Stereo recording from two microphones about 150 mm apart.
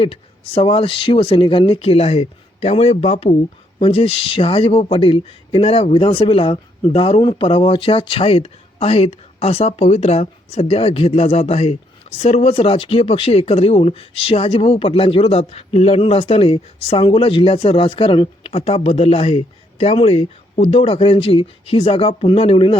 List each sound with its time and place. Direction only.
0.0 s speech: 35° left (ahead or behind)